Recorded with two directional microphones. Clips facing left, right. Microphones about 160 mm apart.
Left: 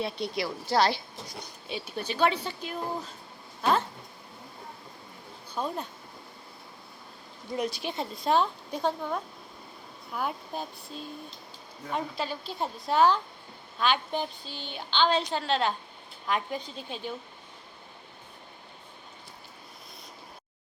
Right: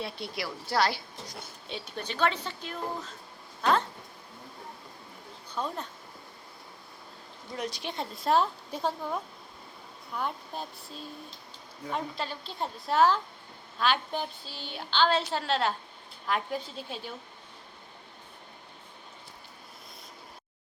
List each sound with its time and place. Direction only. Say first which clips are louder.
0.0 s a woman's voice: left 5 dB; 20° left (ahead or behind)
1.4 s speech: left 4 dB; 5° left (ahead or behind)
5.5 s speech: left 2 dB; 10° left (ahead or behind)
7.6 s a woman's voice: left 2 dB; 5° left (ahead or behind)